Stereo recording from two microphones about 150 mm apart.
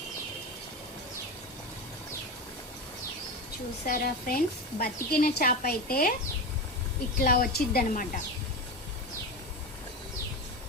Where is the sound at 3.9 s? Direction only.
90° left.